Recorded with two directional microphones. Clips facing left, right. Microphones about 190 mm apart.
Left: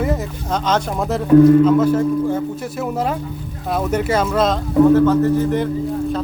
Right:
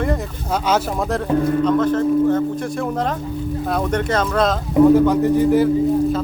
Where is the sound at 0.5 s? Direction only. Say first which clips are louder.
Even; 10° right (ahead or behind).